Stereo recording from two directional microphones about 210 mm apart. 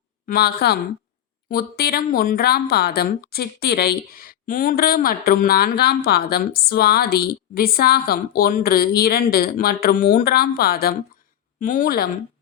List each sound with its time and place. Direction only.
0.3 s speech: 45° left (ahead or behind)